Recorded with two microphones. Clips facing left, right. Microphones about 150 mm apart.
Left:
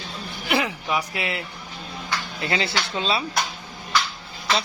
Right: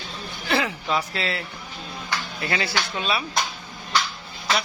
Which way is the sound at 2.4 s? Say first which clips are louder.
Left 1 dB; 25° left (ahead or behind).